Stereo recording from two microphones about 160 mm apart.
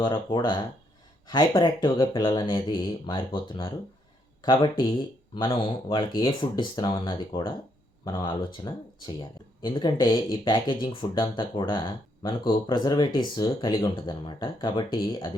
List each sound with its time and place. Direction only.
0.0 s speech: 30° left (ahead or behind)